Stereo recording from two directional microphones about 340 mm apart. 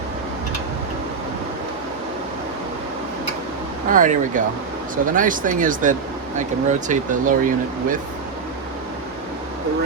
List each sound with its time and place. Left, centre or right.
3.9 s speech: right